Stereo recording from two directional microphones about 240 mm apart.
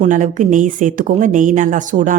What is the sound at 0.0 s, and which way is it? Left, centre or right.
A woman's voice, right.